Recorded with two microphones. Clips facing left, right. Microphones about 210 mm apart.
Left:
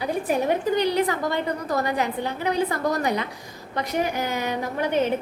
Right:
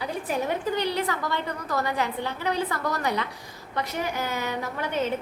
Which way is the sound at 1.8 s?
15° left (ahead or behind).